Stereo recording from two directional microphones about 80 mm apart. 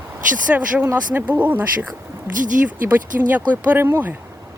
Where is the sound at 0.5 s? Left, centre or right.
Right.